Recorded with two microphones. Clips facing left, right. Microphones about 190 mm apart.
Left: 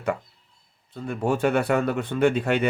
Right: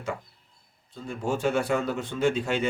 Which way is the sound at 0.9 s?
60° left (ahead or behind).